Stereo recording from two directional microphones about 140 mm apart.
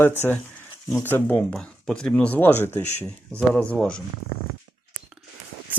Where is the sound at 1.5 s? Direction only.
5° left (ahead or behind).